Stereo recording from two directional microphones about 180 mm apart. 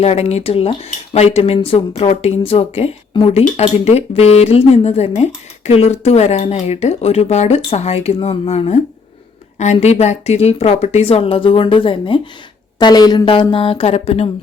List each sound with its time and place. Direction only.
0.0 s speech: 35° left (ahead or behind)